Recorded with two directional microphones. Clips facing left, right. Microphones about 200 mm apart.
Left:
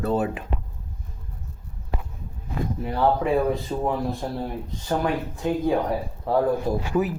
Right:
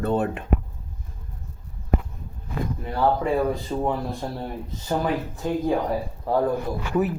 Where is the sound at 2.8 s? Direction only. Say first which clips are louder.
Left 1 dB; centre (ahead or behind).